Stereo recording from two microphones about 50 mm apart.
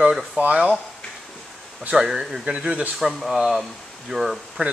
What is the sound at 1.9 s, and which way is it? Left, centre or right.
Speech, centre.